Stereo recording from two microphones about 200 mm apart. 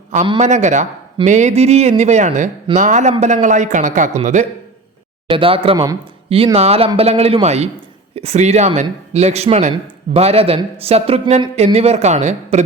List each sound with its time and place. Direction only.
0.3 s speech: 35° right (ahead or behind)